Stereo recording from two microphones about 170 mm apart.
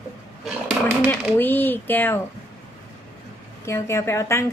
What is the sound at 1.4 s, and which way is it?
Speech, 10° left (ahead or behind).